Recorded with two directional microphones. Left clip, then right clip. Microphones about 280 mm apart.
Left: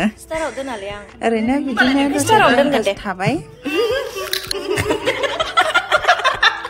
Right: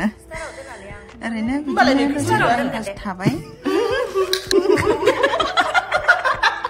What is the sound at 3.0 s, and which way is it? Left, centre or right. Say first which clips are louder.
Speech: left 4 dB; centre.